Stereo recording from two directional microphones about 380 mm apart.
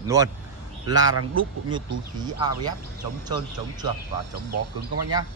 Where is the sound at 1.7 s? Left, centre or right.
Centre.